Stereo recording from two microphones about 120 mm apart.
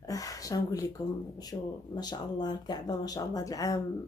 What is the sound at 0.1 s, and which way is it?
Speech, 30° left (ahead or behind).